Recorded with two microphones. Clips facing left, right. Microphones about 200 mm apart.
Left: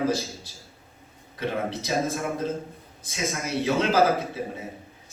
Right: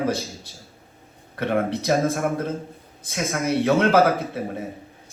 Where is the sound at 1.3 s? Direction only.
60° right (ahead or behind).